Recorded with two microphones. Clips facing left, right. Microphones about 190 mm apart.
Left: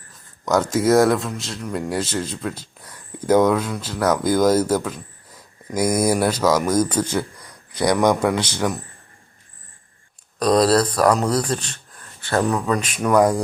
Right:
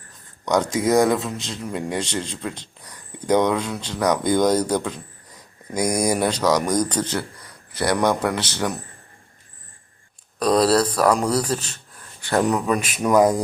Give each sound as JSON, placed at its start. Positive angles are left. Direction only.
{"t": 0.1, "sound": "speech", "side_deg": 0}
{"t": 10.4, "sound": "speech", "side_deg": -5}
{"t": 12.5, "sound": "speech", "side_deg": -20}